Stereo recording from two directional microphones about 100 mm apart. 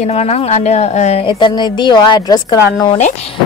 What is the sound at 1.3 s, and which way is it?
A woman's voice, 50° left (ahead or behind).